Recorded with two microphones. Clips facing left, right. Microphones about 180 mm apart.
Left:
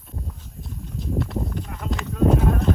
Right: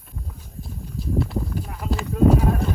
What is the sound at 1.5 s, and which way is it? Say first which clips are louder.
Clip-clop: right 2 dB; 5° right (ahead or behind).